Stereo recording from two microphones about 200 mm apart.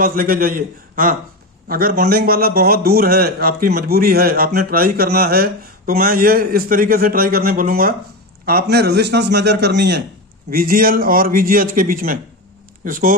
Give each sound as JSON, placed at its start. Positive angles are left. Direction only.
{"t": 0.0, "sound": "a man's voice", "side_deg": -45}
{"t": 10.5, "sound": "a man's voice", "side_deg": -45}